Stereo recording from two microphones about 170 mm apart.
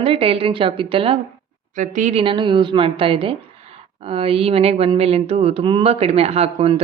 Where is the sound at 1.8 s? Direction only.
45° right (ahead or behind).